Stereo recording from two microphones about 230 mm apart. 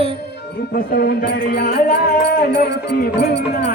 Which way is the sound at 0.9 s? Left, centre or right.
Left.